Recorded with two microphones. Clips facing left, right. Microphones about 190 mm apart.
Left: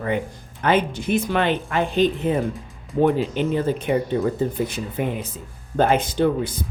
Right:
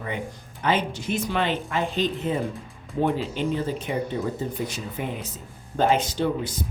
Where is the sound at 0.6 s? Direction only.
55° left (ahead or behind).